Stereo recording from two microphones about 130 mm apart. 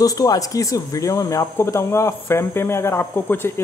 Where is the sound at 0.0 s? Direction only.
25° left (ahead or behind).